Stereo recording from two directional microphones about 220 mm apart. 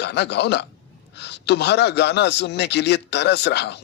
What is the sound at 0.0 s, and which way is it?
A man's voice, 50° left (ahead or behind).